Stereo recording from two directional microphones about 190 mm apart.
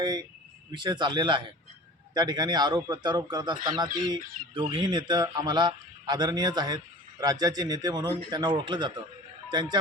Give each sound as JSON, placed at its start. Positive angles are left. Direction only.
{"t": 0.0, "sound": "a man's voice", "side_deg": -20}